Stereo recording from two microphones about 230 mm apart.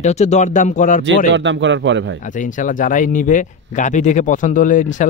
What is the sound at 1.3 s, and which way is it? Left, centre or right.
Speech, right.